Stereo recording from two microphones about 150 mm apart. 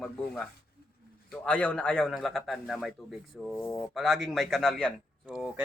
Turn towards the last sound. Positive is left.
turn(degrees=-5)  # may be behind; listen again after turning